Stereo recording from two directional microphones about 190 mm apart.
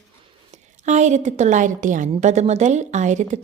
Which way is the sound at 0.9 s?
40° right (ahead or behind).